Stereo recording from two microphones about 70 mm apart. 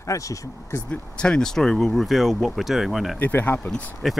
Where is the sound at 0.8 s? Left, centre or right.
Centre.